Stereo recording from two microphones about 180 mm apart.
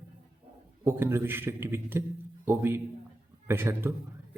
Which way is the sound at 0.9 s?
15° right (ahead or behind).